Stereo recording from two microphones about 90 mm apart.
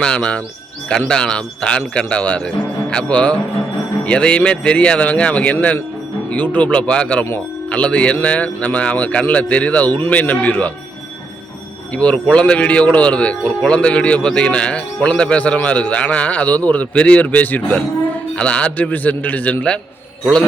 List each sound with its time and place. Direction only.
0.0 s a man's voice: 10° left (ahead or behind)
11.9 s a man's voice: 15° left (ahead or behind)